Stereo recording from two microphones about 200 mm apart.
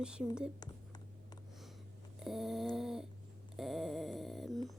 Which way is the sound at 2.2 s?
Centre (ahead or behind).